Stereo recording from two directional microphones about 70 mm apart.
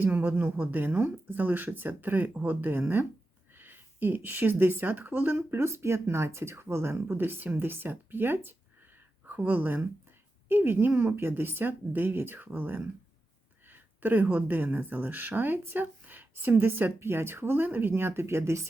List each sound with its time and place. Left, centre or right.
0.0 s speech: right